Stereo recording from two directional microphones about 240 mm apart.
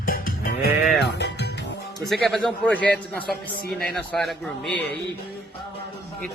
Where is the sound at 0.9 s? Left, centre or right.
Left.